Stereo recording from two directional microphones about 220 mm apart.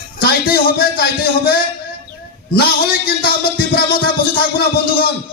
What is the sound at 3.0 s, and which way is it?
A man's voice, 45° left (ahead or behind).